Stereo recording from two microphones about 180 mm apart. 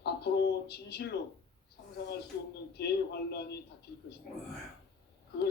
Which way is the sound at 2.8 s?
65° left (ahead or behind).